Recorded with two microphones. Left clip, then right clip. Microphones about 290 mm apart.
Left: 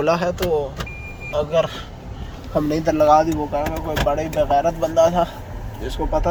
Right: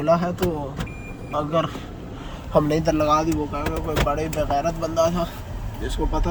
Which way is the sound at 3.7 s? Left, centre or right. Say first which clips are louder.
Left 3 dB; right.